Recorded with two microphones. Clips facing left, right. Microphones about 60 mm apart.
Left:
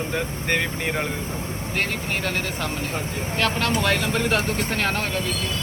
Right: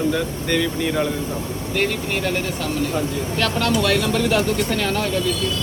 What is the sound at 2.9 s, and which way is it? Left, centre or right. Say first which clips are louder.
Speech: right 4 dB; left.